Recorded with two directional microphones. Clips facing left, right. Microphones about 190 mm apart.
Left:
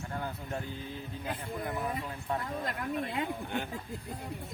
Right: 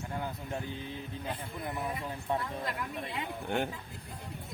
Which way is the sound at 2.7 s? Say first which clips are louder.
Left 3 dB; 50° left (ahead or behind).